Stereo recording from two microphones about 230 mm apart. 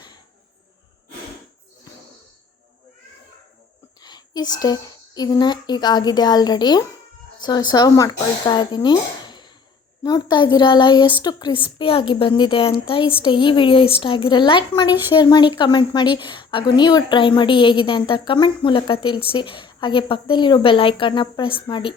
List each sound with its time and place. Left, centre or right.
4.0 s a woman's voice: centre